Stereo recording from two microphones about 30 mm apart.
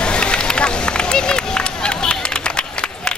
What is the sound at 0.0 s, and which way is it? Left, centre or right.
Run, left.